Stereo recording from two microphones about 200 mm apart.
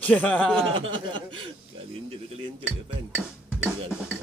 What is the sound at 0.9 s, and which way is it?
Speech, 25° right (ahead or behind).